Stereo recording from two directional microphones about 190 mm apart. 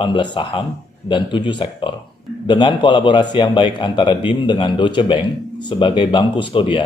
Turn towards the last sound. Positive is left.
turn(degrees=25)  # may be behind; listen again after turning